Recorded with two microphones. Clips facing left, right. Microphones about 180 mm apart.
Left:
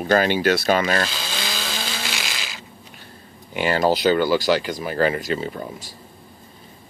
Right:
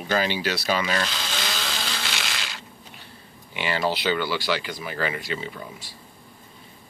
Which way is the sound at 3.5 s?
45° left (ahead or behind).